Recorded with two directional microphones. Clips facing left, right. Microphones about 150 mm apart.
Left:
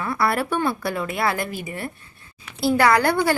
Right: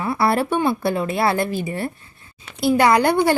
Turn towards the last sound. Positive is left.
turn(degrees=-20)  # may be behind; listen again after turning